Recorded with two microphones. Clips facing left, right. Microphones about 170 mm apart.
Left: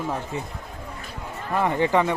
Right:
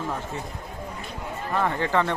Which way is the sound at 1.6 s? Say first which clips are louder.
Left 4 dB; 15° left (ahead or behind).